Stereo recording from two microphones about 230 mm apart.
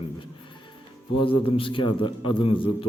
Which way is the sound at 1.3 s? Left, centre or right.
Left.